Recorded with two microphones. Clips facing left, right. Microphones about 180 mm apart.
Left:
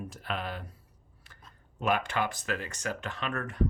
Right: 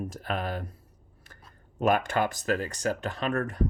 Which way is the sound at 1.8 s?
45° right (ahead or behind).